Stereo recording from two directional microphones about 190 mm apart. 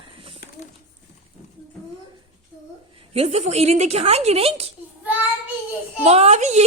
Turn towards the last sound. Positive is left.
turn(degrees=-40)  # may be behind; listen again after turning